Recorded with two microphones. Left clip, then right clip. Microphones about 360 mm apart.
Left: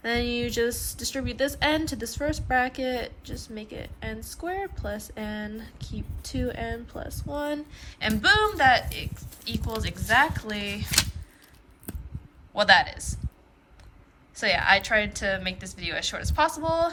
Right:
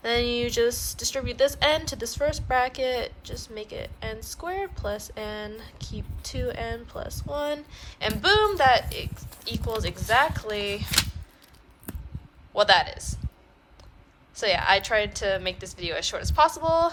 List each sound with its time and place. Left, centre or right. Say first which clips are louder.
0.0 s a woman's voice: right 3 dB; centre
12.5 s a woman's voice: even; centre
14.3 s a woman's voice: even; centre